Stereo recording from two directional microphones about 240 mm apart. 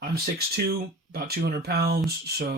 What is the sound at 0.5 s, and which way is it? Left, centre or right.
Speech, right.